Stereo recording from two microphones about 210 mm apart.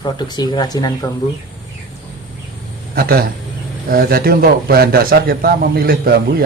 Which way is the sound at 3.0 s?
45° right (ahead or behind).